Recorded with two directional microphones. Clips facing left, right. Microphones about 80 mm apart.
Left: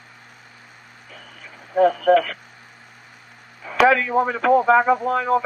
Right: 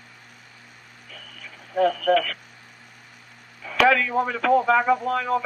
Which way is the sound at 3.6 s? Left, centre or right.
Centre.